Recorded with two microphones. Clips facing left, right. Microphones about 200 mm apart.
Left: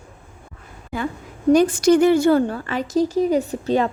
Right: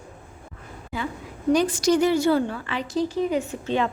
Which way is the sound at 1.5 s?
50° left (ahead or behind).